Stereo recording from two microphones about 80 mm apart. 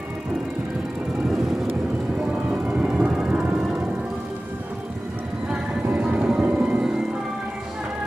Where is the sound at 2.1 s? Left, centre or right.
Centre.